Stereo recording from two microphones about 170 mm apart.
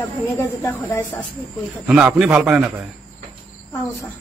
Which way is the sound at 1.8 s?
Centre (ahead or behind).